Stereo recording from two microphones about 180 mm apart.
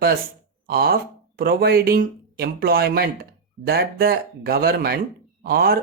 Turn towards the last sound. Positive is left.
turn(degrees=-55)  # may be behind; listen again after turning